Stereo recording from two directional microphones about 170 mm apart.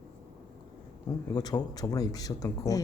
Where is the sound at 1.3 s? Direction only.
25° left (ahead or behind).